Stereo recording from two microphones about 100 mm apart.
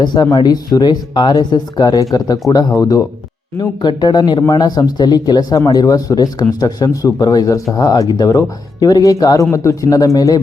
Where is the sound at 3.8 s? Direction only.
45° left (ahead or behind).